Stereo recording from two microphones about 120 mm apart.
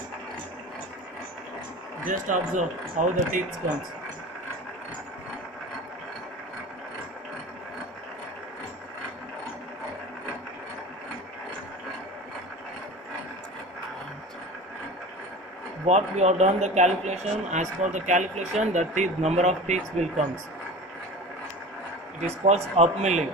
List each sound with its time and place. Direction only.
2.0 s speech: 90° right
15.9 s speech: 70° right (ahead or behind)
22.4 s speech: 65° right (ahead or behind)